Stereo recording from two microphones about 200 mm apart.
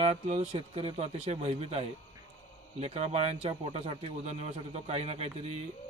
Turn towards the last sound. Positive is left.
turn(degrees=-30)  # may be behind; listen again after turning